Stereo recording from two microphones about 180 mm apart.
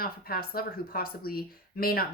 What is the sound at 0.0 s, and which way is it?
A woman's voice, 55° left (ahead or behind).